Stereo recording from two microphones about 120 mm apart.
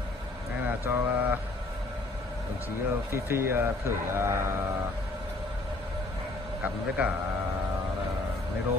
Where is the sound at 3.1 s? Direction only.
20° right (ahead or behind).